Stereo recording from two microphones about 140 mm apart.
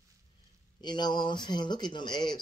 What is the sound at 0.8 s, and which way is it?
Speech, 30° left (ahead or behind).